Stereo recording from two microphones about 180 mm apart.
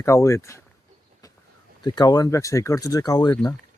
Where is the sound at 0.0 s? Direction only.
15° left (ahead or behind).